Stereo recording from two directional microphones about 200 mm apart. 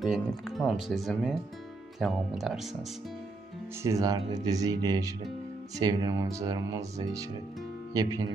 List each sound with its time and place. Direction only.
0.0 s speech: centre (ahead or behind)
3.8 s speech: 15° right (ahead or behind)